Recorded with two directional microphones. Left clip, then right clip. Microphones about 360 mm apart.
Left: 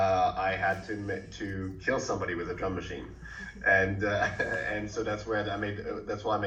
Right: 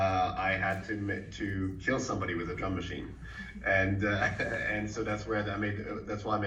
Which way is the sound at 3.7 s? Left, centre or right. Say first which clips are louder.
Left 1 dB; centre.